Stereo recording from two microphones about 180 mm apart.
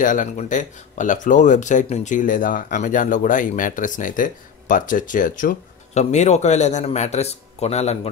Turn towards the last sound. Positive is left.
turn(degrees=35)  # may be behind; listen again after turning